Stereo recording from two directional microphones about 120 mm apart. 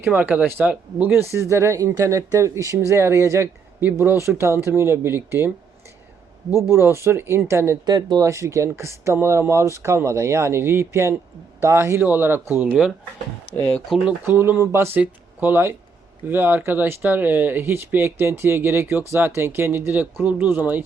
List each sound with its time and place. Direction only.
0.0 s speech: 15° right (ahead or behind)
6.5 s speech: 20° right (ahead or behind)
7.9 s speech: 35° right (ahead or behind); by 12.9 s 15° right (ahead or behind)
13.9 s speech: 5° right (ahead or behind)
14.3 s speech: 20° right (ahead or behind)